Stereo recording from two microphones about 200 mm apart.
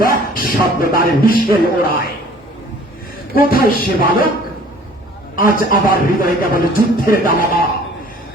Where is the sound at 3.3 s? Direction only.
50° left (ahead or behind).